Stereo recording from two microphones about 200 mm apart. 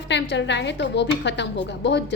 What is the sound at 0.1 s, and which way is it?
A woman's voice, 60° left (ahead or behind).